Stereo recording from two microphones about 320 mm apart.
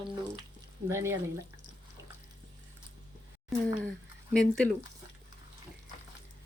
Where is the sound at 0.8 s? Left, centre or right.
Centre.